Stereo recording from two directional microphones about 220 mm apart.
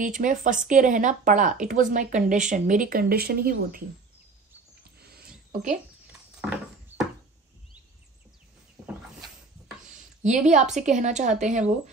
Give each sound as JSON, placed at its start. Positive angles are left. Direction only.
{"t": 0.0, "sound": "speech", "side_deg": -35}
{"t": 5.0, "sound": "a sound", "side_deg": -45}
{"t": 5.5, "sound": "speech", "side_deg": -35}
{"t": 9.8, "sound": "a woman's voice", "side_deg": -35}